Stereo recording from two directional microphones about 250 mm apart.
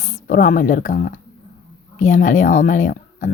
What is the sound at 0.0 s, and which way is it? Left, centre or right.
Speech, left.